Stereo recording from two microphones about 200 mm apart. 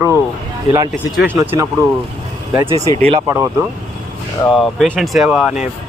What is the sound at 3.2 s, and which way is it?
Speech, 10° right (ahead or behind).